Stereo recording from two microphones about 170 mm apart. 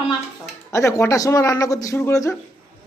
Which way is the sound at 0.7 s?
20° left (ahead or behind).